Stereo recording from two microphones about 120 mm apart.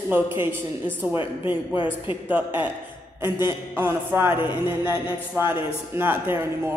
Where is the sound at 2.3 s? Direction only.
15° right (ahead or behind).